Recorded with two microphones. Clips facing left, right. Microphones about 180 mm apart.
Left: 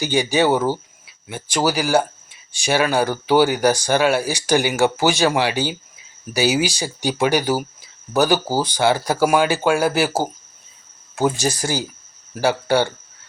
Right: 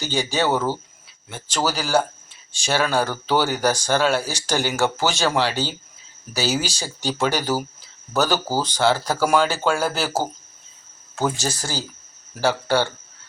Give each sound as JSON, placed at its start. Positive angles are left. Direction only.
{"t": 0.0, "sound": "speech", "side_deg": 15}
{"t": 11.1, "sound": "speech", "side_deg": 15}